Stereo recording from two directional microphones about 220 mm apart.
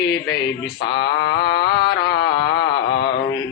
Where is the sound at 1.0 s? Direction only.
50° left (ahead or behind).